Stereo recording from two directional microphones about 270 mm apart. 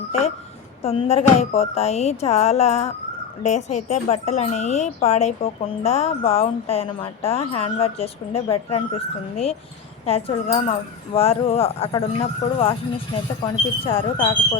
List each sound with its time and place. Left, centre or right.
0.8 s speech: left